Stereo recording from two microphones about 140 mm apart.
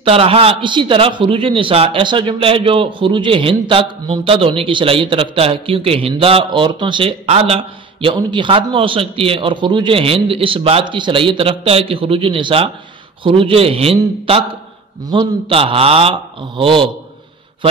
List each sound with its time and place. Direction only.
0.0 s a man's voice: 45° right (ahead or behind)